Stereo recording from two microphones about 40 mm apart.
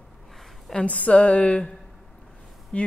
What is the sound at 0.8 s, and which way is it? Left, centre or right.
Speech, left.